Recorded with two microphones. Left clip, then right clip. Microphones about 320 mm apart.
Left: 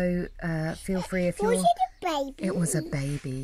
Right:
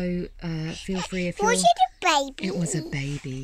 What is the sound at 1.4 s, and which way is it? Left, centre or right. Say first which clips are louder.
Speech: right 5 dB; right.